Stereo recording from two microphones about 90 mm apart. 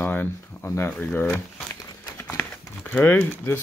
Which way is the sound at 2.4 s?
20° left (ahead or behind).